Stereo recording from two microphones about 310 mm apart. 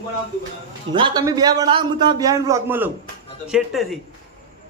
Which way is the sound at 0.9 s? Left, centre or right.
Centre.